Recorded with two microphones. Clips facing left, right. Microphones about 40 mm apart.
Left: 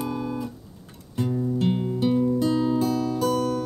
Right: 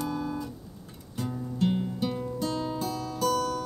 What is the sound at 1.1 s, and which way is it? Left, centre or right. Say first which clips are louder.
Music: left 9 dB; centre.